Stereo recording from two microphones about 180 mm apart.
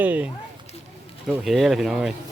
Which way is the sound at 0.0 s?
10° right (ahead or behind).